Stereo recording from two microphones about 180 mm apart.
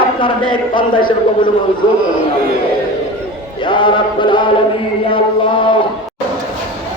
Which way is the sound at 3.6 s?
25° left (ahead or behind).